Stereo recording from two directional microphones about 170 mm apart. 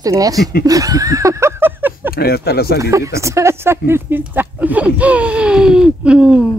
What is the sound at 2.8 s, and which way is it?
Speech, 20° right (ahead or behind).